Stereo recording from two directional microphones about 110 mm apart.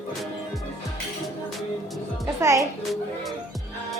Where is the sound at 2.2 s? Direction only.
25° right (ahead or behind).